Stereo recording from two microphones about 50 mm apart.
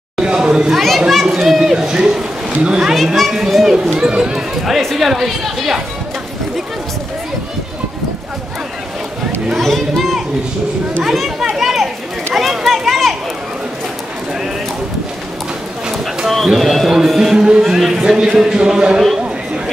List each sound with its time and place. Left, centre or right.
0.2 s chatter: centre
0.8 s a man's voice: centre
3.3 s a man's voice: centre
3.7 s speech: centre
9.6 s a man's voice: centre
11.1 s speech: centre
11.5 s a sound: centre
16.3 s a man's voice: centre